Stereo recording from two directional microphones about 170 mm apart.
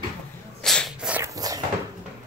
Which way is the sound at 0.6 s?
Centre (ahead or behind).